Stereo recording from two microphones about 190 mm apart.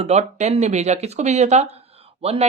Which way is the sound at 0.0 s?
35° right (ahead or behind).